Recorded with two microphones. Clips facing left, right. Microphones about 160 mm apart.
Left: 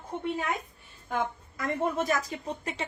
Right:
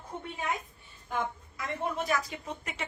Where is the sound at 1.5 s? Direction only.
45° left (ahead or behind).